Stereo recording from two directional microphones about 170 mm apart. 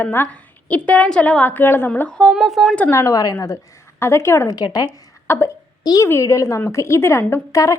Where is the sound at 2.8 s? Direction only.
15° left (ahead or behind).